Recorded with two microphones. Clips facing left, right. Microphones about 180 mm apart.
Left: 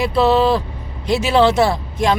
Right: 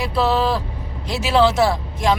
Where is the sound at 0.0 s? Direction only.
Centre (ahead or behind).